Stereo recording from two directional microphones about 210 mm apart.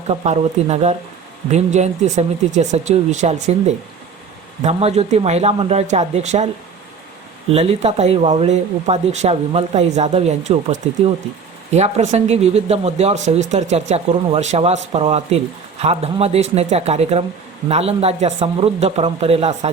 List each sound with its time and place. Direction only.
0.1 s speech: 30° right (ahead or behind)
4.6 s speech: 30° right (ahead or behind)
7.5 s speech: 30° right (ahead or behind)